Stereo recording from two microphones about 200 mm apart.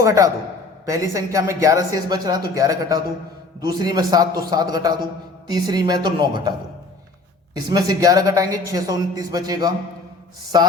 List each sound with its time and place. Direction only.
0.0 s a man's voice: 15° right (ahead or behind)
7.5 s a woman's voice: 20° right (ahead or behind)